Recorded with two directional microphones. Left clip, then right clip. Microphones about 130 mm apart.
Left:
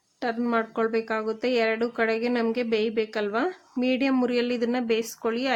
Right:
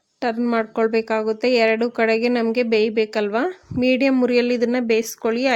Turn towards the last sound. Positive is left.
turn(degrees=-35)  # may be behind; listen again after turning